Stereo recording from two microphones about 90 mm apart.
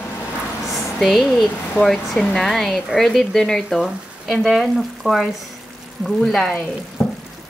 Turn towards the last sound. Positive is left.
turn(degrees=15)  # may be behind; listen again after turning